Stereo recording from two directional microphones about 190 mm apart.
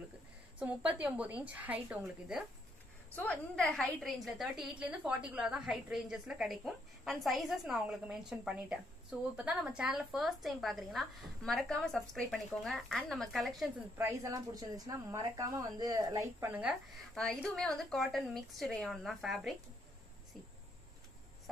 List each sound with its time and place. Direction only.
0.6 s a woman's voice: 5° right (ahead or behind)
3.2 s a woman's voice: 5° left (ahead or behind)
13.9 s a woman's voice: 15° right (ahead or behind)